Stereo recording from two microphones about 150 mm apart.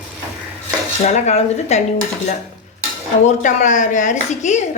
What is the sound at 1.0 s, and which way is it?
Speech, 50° left (ahead or behind).